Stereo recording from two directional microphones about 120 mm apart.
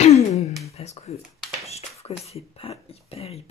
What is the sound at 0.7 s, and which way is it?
Speech, 60° left (ahead or behind).